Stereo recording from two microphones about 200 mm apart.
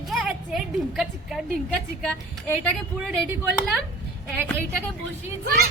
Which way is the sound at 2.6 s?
Centre (ahead or behind).